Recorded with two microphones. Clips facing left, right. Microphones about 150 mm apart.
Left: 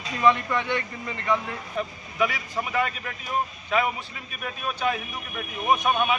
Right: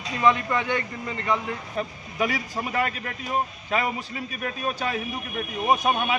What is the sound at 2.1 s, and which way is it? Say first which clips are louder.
Speech: even; 40° right (ahead or behind).